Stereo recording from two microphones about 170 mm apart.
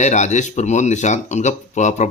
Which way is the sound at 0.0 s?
45° left (ahead or behind).